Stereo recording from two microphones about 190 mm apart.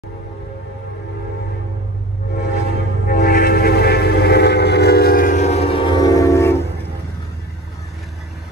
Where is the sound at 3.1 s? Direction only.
55° left (ahead or behind); by 6.6 s 15° left (ahead or behind).